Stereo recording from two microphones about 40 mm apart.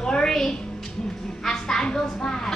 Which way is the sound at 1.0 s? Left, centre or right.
Centre.